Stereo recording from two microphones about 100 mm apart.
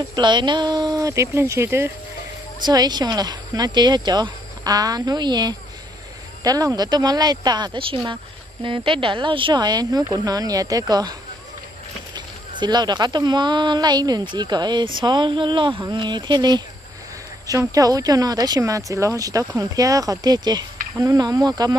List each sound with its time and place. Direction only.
0.1 s speech: 50° right (ahead or behind); by 1.9 s 25° right (ahead or behind)
2.6 s speech: 45° right (ahead or behind)
17.7 s speech: 35° right (ahead or behind)